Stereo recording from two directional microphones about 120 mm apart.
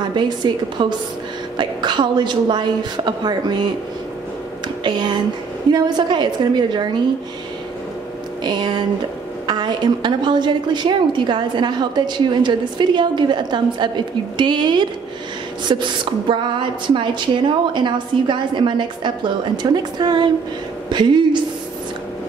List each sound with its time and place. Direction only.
0.0 s a woman's voice: 40° right (ahead or behind)
4.8 s a woman's voice: 40° right (ahead or behind)
8.5 s a woman's voice: 35° right (ahead or behind)